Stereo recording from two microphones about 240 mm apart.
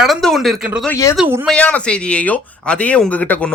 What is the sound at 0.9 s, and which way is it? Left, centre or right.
Speech, centre.